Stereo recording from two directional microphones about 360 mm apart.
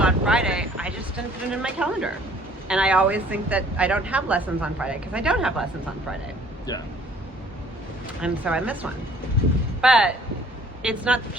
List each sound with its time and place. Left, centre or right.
0.0 s a sound: centre
1.6 s speech: centre
6.7 s speech: centre
8.2 s speech: centre